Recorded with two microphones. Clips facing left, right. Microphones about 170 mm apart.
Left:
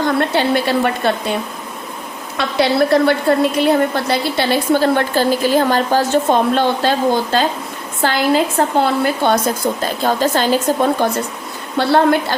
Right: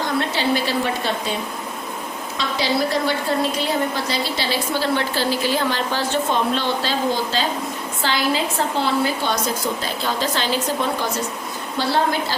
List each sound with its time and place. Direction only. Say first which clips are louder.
0.2 s a woman's voice: left 5 dB; 60° left (ahead or behind)
2.4 s a woman's voice: left 7 dB; 60° left (ahead or behind)